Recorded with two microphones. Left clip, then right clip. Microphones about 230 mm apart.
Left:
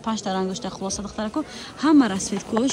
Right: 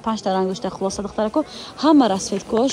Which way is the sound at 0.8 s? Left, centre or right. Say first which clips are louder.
Right 7 dB; right.